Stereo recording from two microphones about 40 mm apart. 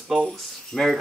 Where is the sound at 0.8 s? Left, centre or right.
Centre.